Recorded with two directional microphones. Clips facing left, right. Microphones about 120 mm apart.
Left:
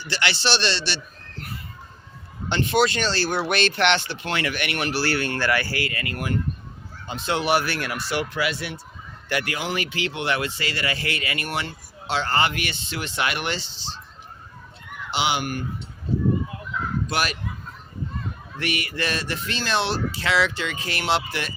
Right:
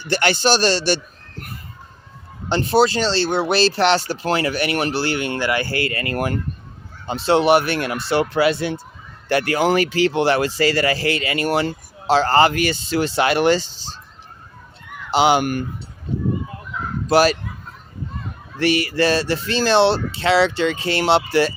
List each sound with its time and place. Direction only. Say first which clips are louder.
0.0 s a man's voice: right 7 dB; 50° right (ahead or behind)
2.5 s speech: right 5 dB; 35° right (ahead or behind)
15.1 s a man's voice: right 9 dB; 45° right (ahead or behind)
17.1 s speech: right 14 dB; 35° right (ahead or behind)
18.6 s speech: right 10 dB; 35° right (ahead or behind)